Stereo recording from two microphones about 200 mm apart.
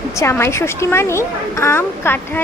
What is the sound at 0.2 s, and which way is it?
A woman's voice, 15° left (ahead or behind).